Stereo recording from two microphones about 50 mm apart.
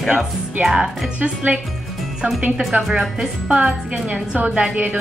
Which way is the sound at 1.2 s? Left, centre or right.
Right.